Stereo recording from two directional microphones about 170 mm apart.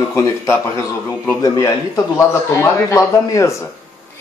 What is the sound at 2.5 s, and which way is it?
A woman's voice, 20° left (ahead or behind).